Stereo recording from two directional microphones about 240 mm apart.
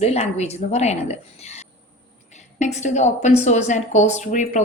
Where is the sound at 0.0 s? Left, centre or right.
Left.